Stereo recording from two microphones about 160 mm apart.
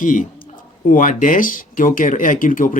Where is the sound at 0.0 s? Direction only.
55° left (ahead or behind).